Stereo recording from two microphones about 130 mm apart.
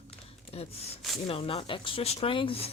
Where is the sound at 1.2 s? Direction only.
45° left (ahead or behind).